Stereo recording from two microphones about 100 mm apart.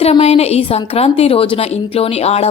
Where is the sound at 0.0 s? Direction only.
90° left.